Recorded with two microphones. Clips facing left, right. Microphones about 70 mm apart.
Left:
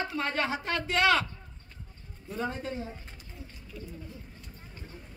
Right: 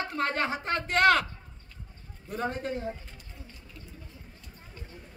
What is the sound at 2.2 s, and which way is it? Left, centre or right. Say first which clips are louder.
Speech: right 2 dB; right.